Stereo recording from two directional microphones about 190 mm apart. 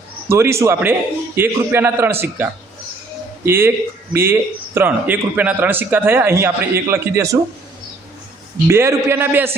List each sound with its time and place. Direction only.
0.3 s a man's voice: 15° right (ahead or behind)
8.6 s a man's voice: 15° right (ahead or behind)